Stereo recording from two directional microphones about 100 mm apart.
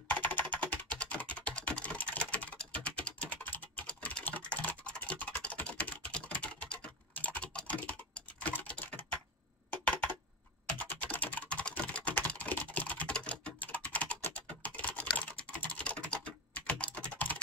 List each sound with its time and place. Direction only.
0.1 s typing: 15° left (ahead or behind)
9.7 s a sound: 15° left (ahead or behind)
10.8 s typing: 15° left (ahead or behind)